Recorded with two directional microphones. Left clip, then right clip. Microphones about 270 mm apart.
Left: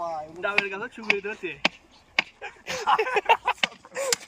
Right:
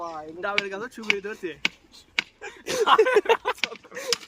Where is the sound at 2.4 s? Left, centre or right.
Right.